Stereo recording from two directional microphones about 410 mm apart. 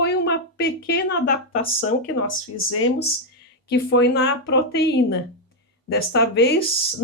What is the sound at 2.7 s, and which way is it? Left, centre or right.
Speech, left.